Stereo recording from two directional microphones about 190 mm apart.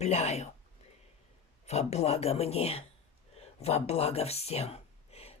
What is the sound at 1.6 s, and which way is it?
Speech, 35° left (ahead or behind).